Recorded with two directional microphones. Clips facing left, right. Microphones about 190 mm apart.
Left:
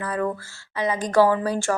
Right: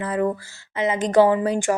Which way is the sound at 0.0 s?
20° right (ahead or behind).